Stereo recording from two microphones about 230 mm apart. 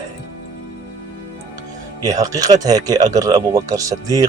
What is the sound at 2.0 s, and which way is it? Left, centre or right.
Speech, centre.